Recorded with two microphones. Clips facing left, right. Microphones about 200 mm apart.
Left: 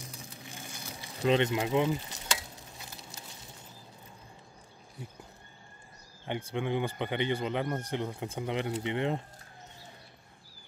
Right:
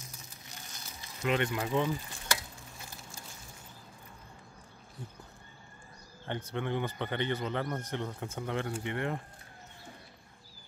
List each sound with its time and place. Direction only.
1.2 s sizzle: 25° left (ahead or behind)
6.2 s speech: 15° left (ahead or behind)
8.4 s sizzle: 20° left (ahead or behind)